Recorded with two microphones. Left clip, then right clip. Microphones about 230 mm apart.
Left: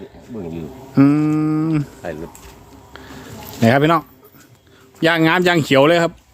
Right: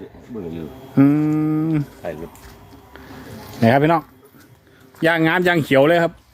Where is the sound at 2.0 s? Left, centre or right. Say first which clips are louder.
Left 1 dB; left.